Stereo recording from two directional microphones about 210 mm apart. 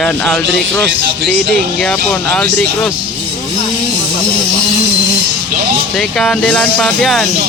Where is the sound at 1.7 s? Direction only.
Centre (ahead or behind).